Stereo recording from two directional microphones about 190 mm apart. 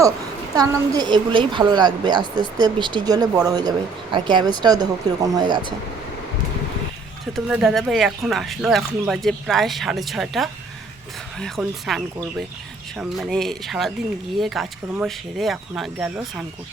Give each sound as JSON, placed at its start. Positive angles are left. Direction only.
{"t": 0.5, "sound": "speech", "side_deg": -20}
{"t": 7.3, "sound": "speech", "side_deg": -5}